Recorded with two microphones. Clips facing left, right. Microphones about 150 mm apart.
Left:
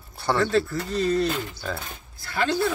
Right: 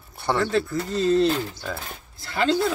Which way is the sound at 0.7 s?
25° right (ahead or behind).